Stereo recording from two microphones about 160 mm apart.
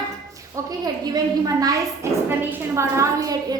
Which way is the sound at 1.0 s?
25° right (ahead or behind).